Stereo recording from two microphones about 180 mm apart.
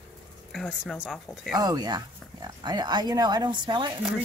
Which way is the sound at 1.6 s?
20° right (ahead or behind).